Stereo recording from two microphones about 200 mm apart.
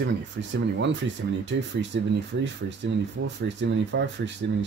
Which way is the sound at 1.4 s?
65° right (ahead or behind).